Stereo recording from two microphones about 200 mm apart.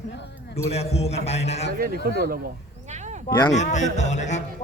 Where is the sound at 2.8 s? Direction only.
35° right (ahead or behind).